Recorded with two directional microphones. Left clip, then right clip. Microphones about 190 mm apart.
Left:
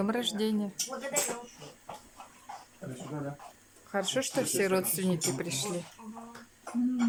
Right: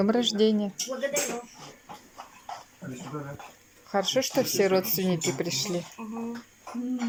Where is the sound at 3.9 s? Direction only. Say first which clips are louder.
Right 5 dB; 5° left (ahead or behind).